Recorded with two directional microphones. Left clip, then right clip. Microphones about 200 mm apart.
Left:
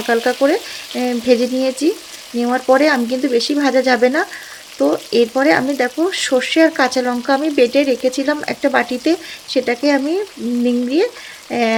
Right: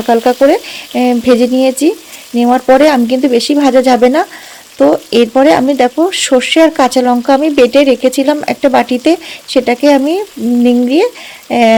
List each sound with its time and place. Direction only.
0.0 s speech: 35° right (ahead or behind)